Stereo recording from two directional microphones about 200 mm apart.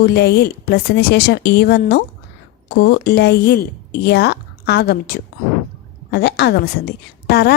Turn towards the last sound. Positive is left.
turn(degrees=55)  # may be behind; listen again after turning